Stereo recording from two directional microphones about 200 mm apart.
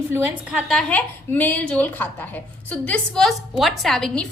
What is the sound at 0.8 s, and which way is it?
A woman's voice, 5° left (ahead or behind).